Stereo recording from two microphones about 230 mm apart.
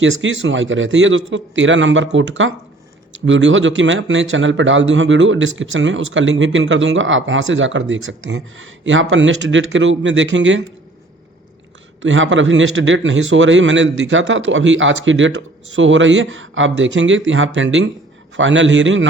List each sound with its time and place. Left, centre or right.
0.0 s speech: right
12.0 s speech: right